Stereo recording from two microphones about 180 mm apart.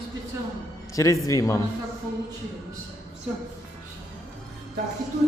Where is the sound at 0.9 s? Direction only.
15° left (ahead or behind).